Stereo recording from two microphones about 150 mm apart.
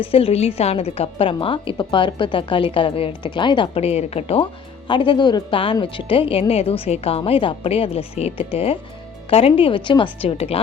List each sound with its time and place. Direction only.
0.0 s a woman's voice: 40° left (ahead or behind)